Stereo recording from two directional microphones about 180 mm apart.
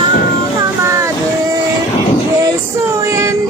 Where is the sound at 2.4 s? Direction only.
20° right (ahead or behind).